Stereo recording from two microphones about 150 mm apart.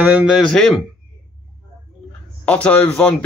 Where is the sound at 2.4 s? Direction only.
10° left (ahead or behind).